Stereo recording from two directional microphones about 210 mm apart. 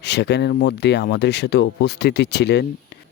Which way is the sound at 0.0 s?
55° left (ahead or behind).